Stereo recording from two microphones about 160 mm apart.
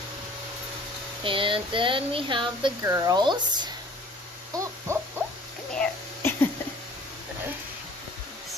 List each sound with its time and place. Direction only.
1.2 s speech: 30° right (ahead or behind)
4.5 s owl: 20° right (ahead or behind)
5.8 s cough: 15° left (ahead or behind)